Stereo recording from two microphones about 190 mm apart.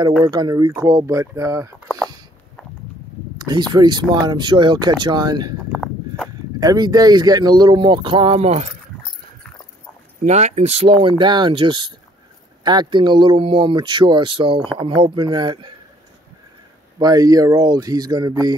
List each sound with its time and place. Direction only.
0.2 s speech: 20° right (ahead or behind)
3.3 s speech: 20° right (ahead or behind)
5.7 s a sound: centre (ahead or behind)
6.6 s speech: 20° right (ahead or behind); by 8.7 s 35° right (ahead or behind)
10.2 s speech: 35° right (ahead or behind)
17.0 s speech: 20° right (ahead or behind)